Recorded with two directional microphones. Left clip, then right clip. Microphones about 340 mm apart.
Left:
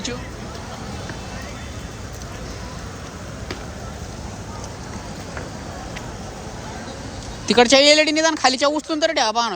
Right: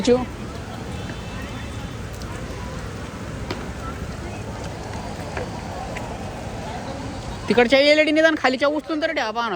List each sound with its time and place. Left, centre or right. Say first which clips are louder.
7.4 s speech: left 2 dB; centre